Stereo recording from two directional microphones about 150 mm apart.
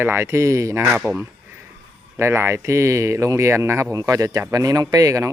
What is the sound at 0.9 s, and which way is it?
Speech, 5° right (ahead or behind).